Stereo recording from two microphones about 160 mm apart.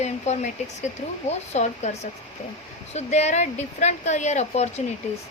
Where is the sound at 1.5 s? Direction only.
45° left (ahead or behind).